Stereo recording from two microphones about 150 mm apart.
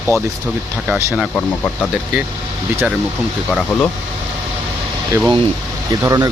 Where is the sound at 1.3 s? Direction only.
10° left (ahead or behind).